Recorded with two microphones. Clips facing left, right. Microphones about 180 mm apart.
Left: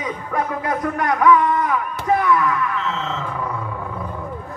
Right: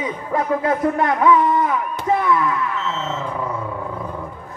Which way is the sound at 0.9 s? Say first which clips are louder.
Left 3 dB; 25° right (ahead or behind).